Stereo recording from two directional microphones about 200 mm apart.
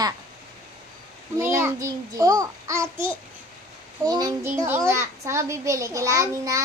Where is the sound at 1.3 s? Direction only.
10° right (ahead or behind).